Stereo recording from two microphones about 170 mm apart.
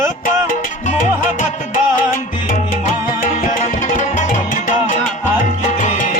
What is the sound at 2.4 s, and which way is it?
Music, 50° left (ahead or behind).